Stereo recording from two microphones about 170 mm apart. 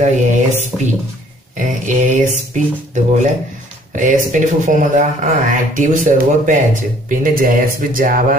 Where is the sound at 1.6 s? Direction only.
45° right (ahead or behind).